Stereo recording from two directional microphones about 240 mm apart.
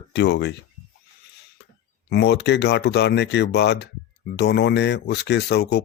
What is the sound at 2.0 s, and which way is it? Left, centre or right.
Speech, left.